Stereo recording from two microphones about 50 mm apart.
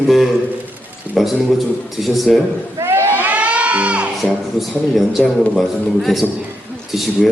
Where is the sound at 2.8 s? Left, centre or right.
Right.